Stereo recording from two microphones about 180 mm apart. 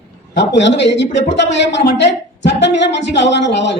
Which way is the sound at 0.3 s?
80° left.